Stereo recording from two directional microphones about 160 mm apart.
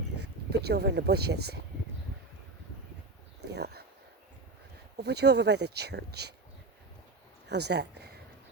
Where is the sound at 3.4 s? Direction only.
90° right.